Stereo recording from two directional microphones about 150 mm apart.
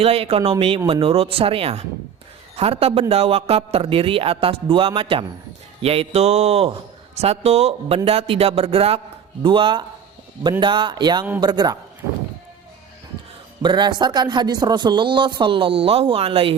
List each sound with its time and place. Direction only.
0.0 s a man's voice: 40° right (ahead or behind)
13.6 s speech: 30° right (ahead or behind)